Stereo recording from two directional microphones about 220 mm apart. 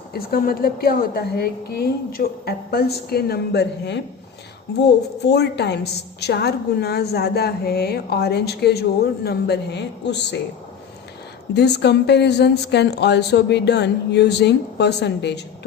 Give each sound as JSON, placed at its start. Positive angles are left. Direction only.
{"t": 0.1, "sound": "a woman's voice", "side_deg": 45}
{"t": 11.5, "sound": "a woman's voice", "side_deg": 50}